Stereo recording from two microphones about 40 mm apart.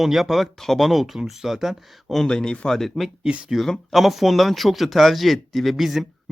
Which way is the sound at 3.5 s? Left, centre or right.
Centre.